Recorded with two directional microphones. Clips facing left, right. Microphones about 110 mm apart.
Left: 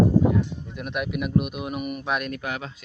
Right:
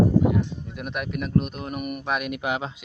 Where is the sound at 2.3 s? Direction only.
20° right (ahead or behind).